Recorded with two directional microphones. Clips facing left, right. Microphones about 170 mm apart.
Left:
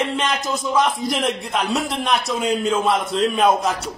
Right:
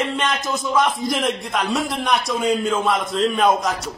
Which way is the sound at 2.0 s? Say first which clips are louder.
Right 1 dB; 5° left (ahead or behind).